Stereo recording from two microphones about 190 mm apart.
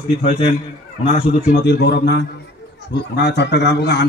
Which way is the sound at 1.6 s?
60° left (ahead or behind).